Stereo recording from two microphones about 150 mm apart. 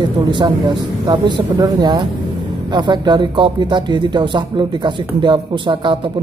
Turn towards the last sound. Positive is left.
turn(degrees=-35)  # may be behind; listen again after turning